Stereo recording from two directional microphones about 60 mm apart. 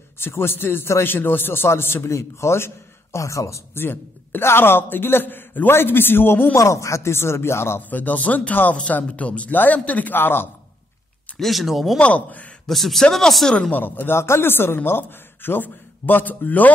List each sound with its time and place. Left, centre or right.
0.2 s speech: left
2.0 s a man's voice: left
3.8 s speech: left
6.5 s speech: left
7.9 s a man's voice: left
11.3 s speech: centre
12.0 s a man's voice: left
12.6 s speech: centre
13.6 s speech: left